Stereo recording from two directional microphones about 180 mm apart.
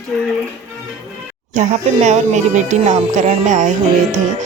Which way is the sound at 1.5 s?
40° right (ahead or behind).